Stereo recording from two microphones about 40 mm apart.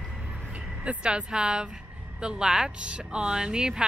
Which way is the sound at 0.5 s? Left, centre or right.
Right.